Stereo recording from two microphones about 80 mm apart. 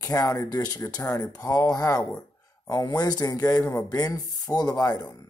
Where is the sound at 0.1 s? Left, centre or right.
Left.